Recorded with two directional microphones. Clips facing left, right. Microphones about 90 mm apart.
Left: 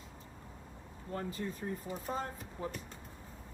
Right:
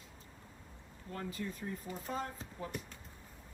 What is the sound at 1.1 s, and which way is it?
Speech, 30° left (ahead or behind).